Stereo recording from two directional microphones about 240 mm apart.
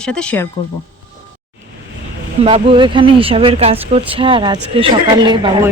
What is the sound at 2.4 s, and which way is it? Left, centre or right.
Speech, right.